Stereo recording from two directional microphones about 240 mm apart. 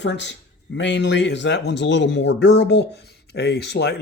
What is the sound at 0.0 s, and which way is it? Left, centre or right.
Speech, left.